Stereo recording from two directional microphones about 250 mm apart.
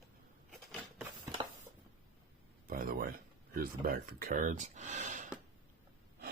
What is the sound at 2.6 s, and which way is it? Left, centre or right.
Speech, right.